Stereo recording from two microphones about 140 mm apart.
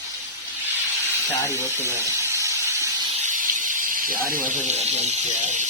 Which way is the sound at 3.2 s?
70° right (ahead or behind).